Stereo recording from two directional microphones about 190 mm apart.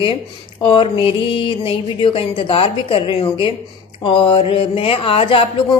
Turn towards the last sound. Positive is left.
turn(degrees=30)  # may be behind; listen again after turning